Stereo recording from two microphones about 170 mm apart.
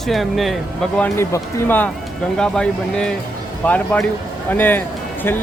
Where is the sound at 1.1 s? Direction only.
15° left (ahead or behind).